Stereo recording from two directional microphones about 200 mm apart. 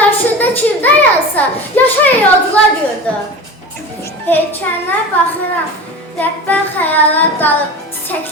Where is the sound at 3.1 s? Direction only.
5° left (ahead or behind).